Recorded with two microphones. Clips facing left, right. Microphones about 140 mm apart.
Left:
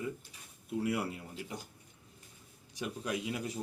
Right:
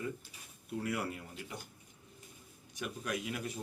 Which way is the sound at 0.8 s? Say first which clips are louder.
Left 2 dB; 25° left (ahead or behind).